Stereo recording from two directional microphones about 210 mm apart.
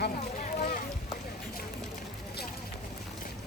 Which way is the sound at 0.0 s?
40° left (ahead or behind).